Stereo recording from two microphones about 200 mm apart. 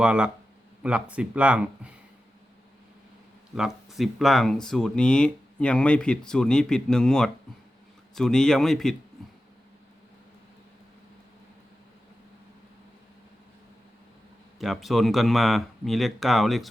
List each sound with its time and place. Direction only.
0.0 s speech: 5° right (ahead or behind)
3.5 s speech: centre (ahead or behind)
14.6 s speech: centre (ahead or behind)